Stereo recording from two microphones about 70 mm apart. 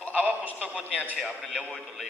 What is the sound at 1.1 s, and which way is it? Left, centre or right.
Speech, centre.